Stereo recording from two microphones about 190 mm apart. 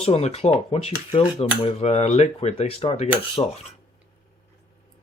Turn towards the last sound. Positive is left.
turn(degrees=30)  # may be behind; listen again after turning